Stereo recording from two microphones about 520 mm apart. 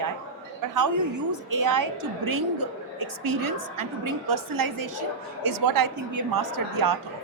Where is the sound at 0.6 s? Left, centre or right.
Right.